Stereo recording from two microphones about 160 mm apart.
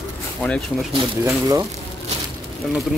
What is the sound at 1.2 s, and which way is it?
Speech, 20° right (ahead or behind).